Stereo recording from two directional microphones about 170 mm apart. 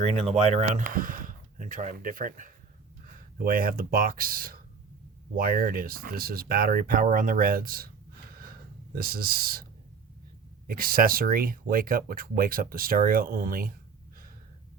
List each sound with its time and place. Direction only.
0.0 s speech: 40° right (ahead or behind); by 7.9 s 60° right (ahead or behind)
8.3 s a sound: 60° right (ahead or behind)
9.0 s speech: 60° right (ahead or behind)
10.7 s speech: 60° right (ahead or behind)